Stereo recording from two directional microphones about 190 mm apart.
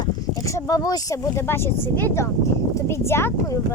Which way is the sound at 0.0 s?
15° left (ahead or behind).